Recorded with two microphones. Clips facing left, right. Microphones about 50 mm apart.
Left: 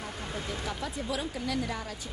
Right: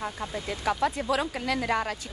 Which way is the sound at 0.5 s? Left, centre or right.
Right.